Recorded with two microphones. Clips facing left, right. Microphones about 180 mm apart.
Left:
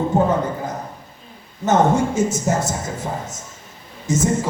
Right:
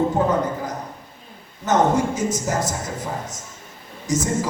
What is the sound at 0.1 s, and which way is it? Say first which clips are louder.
Speech: left 3 dB; 25° left (ahead or behind).